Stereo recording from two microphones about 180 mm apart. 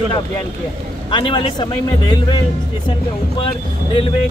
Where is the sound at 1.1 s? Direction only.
25° left (ahead or behind).